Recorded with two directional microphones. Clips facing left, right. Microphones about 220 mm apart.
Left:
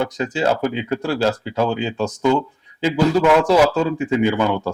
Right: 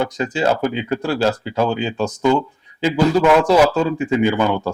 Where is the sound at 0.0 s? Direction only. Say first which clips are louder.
Right 1 dB; 10° right (ahead or behind).